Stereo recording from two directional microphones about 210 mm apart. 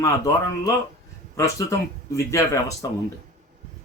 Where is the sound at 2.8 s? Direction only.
20° left (ahead or behind).